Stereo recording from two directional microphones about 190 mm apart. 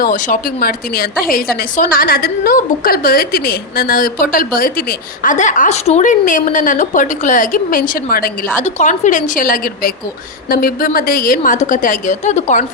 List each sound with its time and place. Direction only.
0.0 s a woman's voice: 45° left (ahead or behind)
8.6 s a woman's voice: 40° left (ahead or behind)